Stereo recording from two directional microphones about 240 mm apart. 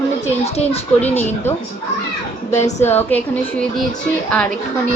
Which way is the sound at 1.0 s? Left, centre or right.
Centre.